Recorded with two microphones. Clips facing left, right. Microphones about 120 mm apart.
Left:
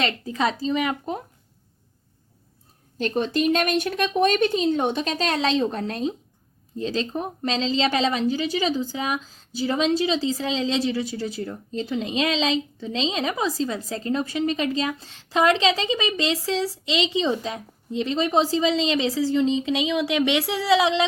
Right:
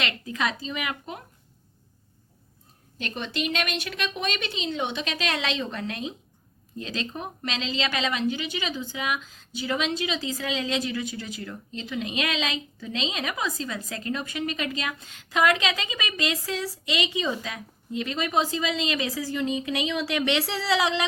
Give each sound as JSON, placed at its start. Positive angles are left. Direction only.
{"t": 0.0, "sound": "a woman's voice", "side_deg": 35}
{"t": 3.0, "sound": "a woman's voice", "side_deg": 45}